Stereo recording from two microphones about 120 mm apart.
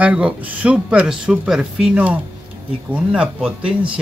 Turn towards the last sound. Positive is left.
turn(degrees=-10)  # may be behind; listen again after turning